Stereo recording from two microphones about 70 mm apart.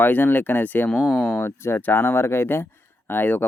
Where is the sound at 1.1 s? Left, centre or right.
Centre.